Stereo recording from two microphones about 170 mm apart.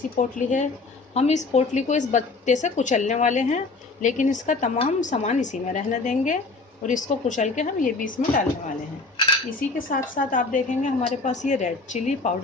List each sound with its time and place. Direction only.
0.2 s a woman's voice: 45° left (ahead or behind)
9.6 s a woman's voice: 55° left (ahead or behind)